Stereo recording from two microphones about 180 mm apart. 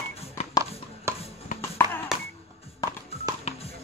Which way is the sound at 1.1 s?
15° right (ahead or behind).